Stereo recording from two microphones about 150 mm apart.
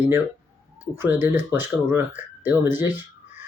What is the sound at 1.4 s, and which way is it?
Speech, 15° right (ahead or behind).